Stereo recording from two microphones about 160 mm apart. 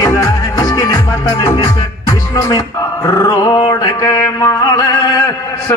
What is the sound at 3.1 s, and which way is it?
Dog, 25° left (ahead or behind).